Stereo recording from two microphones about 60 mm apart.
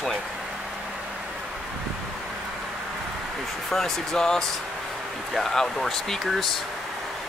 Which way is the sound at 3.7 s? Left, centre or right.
Centre.